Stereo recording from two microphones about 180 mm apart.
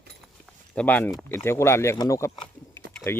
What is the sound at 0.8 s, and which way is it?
Speech, 10° left (ahead or behind).